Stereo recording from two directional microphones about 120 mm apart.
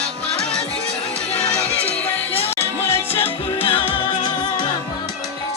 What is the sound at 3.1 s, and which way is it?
Music, 50° left (ahead or behind).